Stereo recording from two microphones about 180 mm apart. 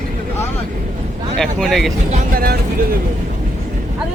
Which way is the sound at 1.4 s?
Centre (ahead or behind).